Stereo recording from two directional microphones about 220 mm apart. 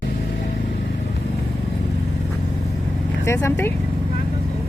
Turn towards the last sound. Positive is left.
turn(degrees=10)  # may be behind; listen again after turning